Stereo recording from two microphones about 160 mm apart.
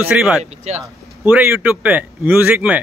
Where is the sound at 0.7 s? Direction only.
40° right (ahead or behind).